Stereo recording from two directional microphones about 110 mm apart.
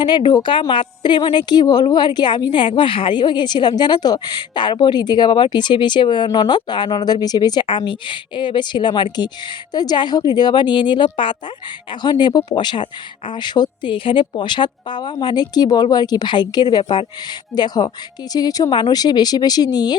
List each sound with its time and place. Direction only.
0.0 s a woman's voice: 45° left (ahead or behind)